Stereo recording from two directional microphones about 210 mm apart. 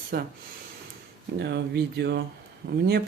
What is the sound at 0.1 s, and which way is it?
Speech, 50° right (ahead or behind).